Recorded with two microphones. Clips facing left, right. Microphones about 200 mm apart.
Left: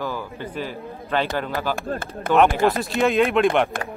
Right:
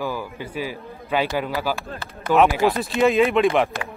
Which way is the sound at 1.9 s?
50° left (ahead or behind).